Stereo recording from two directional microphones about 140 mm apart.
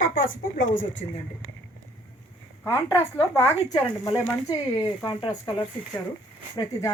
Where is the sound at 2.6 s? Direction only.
15° left (ahead or behind).